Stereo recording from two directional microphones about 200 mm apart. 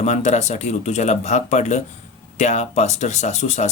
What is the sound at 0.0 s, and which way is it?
Speech, 35° left (ahead or behind).